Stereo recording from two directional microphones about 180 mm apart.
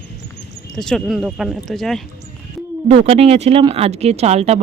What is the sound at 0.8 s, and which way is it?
Speech, centre (ahead or behind).